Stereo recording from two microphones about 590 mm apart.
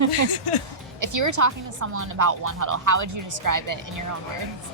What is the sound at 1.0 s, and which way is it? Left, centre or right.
Speech, right.